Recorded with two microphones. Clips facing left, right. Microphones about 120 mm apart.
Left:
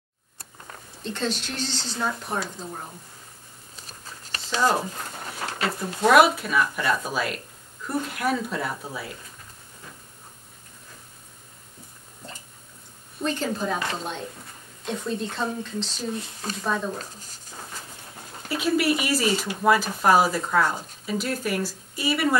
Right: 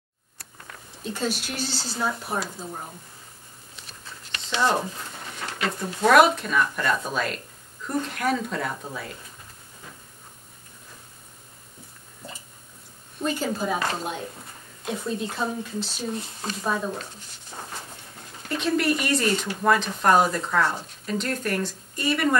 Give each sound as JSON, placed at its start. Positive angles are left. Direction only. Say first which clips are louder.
{"t": 1.0, "sound": "a woman's voice", "louder": "even", "side_deg": -10}
{"t": 3.7, "sound": "a sound", "louder": "left 1 dB", "side_deg": 40}
{"t": 5.9, "sound": "speech", "louder": "even", "side_deg": 5}
{"t": 13.2, "sound": "a woman's voice", "louder": "even", "side_deg": -5}
{"t": 17.0, "sound": "speech", "louder": "even", "side_deg": 40}
{"t": 18.5, "sound": "speech", "louder": "left 1 dB", "side_deg": 5}